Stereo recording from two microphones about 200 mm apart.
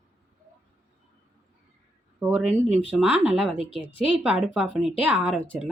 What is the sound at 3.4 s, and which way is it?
Speech, 25° left (ahead or behind).